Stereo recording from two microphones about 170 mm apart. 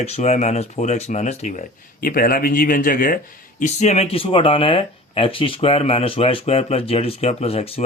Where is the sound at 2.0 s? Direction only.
60° left (ahead or behind).